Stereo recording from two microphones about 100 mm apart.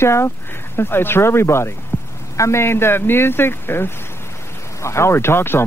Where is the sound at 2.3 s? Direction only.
30° left (ahead or behind).